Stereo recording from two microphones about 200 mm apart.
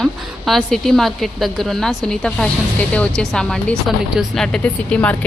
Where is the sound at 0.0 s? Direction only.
Centre (ahead or behind).